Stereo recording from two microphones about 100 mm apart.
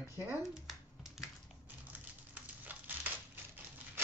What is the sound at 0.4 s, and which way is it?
Finger snapping, 5° right (ahead or behind).